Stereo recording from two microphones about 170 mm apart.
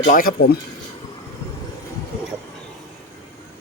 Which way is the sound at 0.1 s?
55° left (ahead or behind).